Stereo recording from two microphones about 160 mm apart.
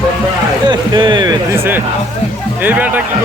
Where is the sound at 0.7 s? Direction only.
30° right (ahead or behind).